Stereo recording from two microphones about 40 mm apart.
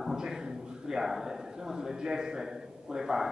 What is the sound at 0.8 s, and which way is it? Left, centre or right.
A man's voice, centre.